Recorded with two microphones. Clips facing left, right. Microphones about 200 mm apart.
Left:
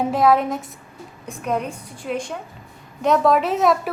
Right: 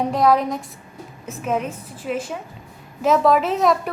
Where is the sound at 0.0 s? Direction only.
Centre (ahead or behind).